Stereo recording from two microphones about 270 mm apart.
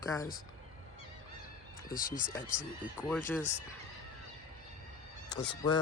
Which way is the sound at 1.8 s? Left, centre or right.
Left.